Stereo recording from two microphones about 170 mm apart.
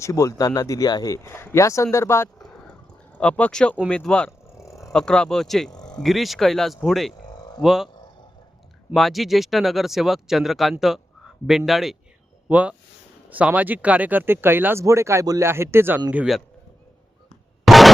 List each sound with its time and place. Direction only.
0.0 s speech: 20° left (ahead or behind)
2.4 s a sound: 5° left (ahead or behind)
3.8 s speech: 5° left (ahead or behind)
4.3 s a sound: 15° left (ahead or behind)
4.9 s speech: 5° left (ahead or behind)
5.7 s a sound: 25° left (ahead or behind)
6.0 s speech: centre (ahead or behind)
8.9 s speech: centre (ahead or behind)
16.1 s speech: 5° right (ahead or behind)
17.7 s music: centre (ahead or behind)